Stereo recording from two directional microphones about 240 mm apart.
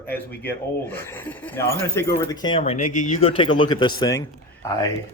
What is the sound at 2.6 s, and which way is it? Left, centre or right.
Speech, left.